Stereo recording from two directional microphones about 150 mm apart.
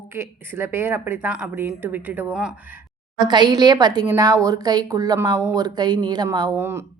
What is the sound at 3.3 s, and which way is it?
A woman's voice, 30° right (ahead or behind).